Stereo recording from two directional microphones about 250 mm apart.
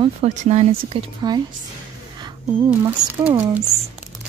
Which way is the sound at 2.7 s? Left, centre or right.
Centre.